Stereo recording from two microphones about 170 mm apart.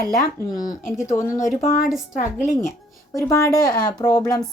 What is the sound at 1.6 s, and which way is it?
Speech, 45° left (ahead or behind).